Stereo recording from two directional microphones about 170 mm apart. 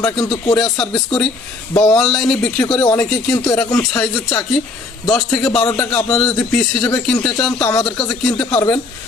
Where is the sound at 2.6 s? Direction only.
25° left (ahead or behind).